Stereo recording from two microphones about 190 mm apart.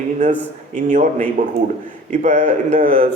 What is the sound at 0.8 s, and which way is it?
A man's voice, 40° right (ahead or behind).